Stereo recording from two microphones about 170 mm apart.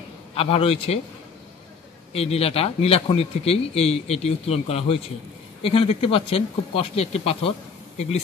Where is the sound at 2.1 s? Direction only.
35° left (ahead or behind).